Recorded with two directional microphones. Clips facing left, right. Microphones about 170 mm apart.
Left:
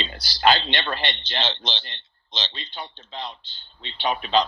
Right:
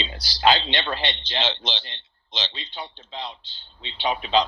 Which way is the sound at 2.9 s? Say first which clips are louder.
Even; 50° left (ahead or behind).